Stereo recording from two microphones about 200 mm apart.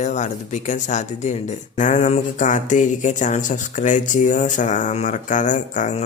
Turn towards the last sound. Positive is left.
turn(degrees=40)  # may be behind; listen again after turning